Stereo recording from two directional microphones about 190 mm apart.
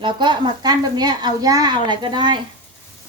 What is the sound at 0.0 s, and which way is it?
Speech, 25° right (ahead or behind).